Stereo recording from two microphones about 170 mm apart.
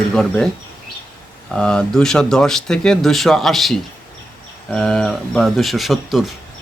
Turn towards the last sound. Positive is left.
turn(degrees=0)  # may be behind; listen again after turning